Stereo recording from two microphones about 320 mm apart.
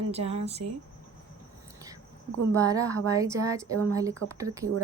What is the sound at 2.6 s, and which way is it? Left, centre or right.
A woman's voice, centre.